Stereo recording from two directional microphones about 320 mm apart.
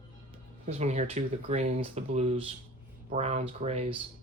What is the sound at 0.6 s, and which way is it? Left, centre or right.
Speech, right.